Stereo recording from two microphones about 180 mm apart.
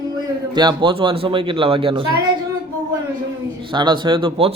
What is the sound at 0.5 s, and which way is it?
Speech, 25° right (ahead or behind).